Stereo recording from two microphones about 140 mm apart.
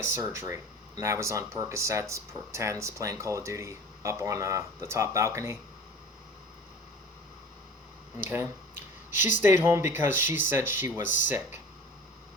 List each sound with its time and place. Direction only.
0.0 s speech: 20° right (ahead or behind)
8.3 s speech: 15° right (ahead or behind)